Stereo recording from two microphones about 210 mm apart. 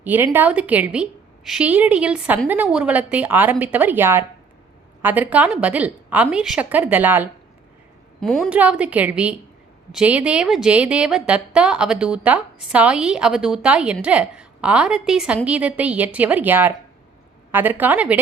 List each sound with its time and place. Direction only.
0.0 s a woman's voice: 10° right (ahead or behind)